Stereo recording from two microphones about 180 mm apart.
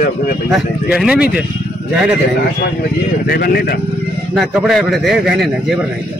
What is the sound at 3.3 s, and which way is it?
Speech, 60° left (ahead or behind).